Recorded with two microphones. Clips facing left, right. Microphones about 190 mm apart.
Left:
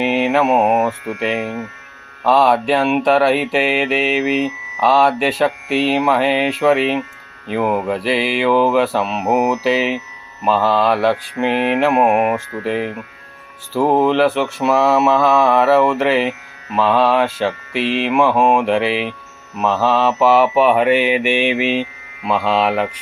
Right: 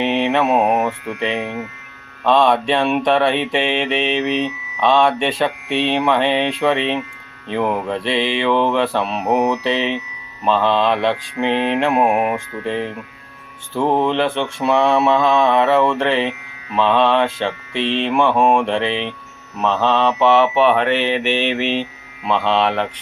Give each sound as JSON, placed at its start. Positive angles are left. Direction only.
{"t": 0.0, "sound": "mantra", "side_deg": 5}
{"t": 11.5, "sound": "mantra", "side_deg": -25}
{"t": 11.8, "sound": "mantra", "side_deg": 5}
{"t": 17.8, "sound": "mantra", "side_deg": -30}
{"t": 18.1, "sound": "mantra", "side_deg": 5}